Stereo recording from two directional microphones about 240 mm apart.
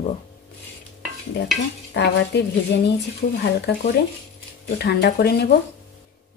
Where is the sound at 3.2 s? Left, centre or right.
Left.